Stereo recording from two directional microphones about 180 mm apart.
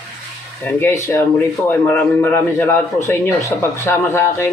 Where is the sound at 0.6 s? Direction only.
10° left (ahead or behind).